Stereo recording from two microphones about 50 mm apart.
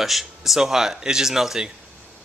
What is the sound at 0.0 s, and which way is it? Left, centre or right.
Speech, centre.